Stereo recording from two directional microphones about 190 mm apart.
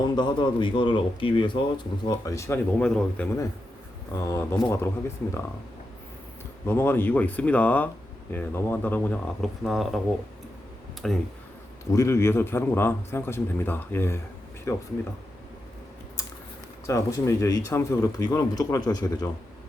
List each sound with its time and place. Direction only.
0.0 s a man's voice: 25° left (ahead or behind); by 3.2 s 5° left (ahead or behind)
4.1 s speech: 15° left (ahead or behind)
6.7 s speech: 10° left (ahead or behind)
11.0 s speech: centre (ahead or behind)
11.9 s speech: 15° left (ahead or behind)
16.8 s speech: 15° left (ahead or behind)